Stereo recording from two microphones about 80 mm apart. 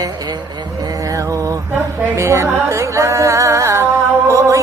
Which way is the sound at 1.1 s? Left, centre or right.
Right.